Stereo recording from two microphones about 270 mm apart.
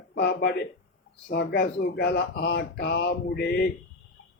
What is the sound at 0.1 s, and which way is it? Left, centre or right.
Speech, left.